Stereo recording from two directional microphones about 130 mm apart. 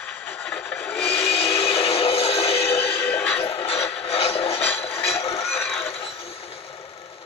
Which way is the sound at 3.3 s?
45° left (ahead or behind).